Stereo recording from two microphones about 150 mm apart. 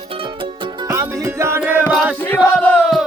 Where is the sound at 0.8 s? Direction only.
20° right (ahead or behind).